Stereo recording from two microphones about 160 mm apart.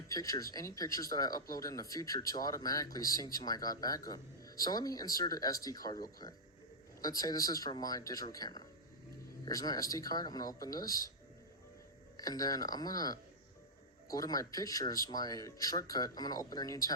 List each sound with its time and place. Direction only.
0.1 s speech: 20° left (ahead or behind)
7.0 s speech: 25° left (ahead or behind)
12.1 s speech: 25° left (ahead or behind)